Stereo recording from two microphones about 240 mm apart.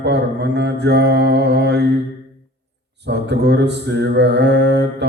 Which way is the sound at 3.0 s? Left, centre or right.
Right.